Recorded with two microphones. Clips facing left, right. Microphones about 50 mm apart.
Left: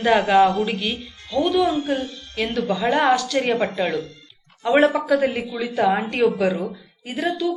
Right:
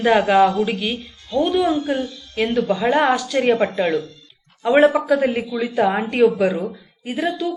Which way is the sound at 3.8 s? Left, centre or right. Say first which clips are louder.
Right 3 dB; right.